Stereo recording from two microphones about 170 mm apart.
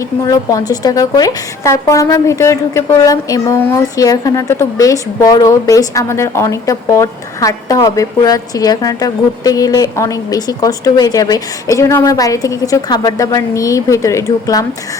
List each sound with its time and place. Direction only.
0.3 s a woman's voice: 20° left (ahead or behind)